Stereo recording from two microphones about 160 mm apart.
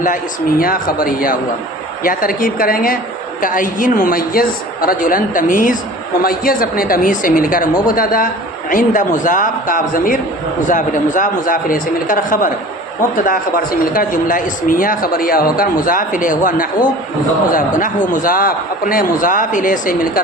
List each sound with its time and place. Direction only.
0.6 s speech: 65° left (ahead or behind)
8.7 s speech: 50° left (ahead or behind)